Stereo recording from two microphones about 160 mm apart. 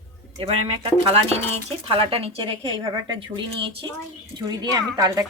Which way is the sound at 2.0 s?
35° right (ahead or behind).